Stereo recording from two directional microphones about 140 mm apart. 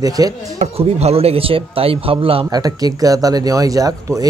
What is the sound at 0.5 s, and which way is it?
Speech, 50° right (ahead or behind).